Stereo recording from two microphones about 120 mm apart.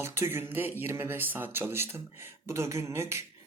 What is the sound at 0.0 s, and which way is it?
Speech, 20° right (ahead or behind).